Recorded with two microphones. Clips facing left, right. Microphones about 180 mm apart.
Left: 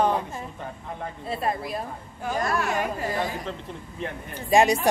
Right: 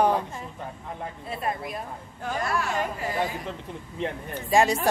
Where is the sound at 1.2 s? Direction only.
35° left (ahead or behind).